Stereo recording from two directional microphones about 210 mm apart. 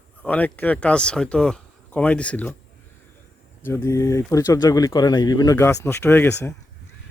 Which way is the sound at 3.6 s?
10° left (ahead or behind).